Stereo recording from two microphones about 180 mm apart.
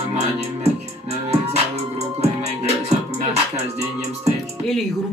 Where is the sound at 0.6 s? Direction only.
35° right (ahead or behind).